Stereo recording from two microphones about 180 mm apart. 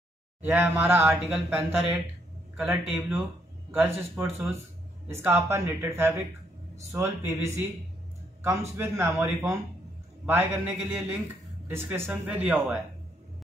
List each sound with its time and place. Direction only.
0.4 s speech: 10° right (ahead or behind)
8.4 s speech: 15° right (ahead or behind)